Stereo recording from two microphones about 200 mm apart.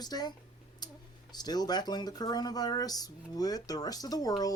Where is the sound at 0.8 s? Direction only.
20° left (ahead or behind).